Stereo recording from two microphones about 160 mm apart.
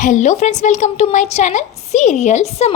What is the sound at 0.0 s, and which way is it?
A woman's voice, 50° left (ahead or behind).